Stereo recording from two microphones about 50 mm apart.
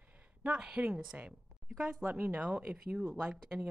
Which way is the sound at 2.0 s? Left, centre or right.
Right.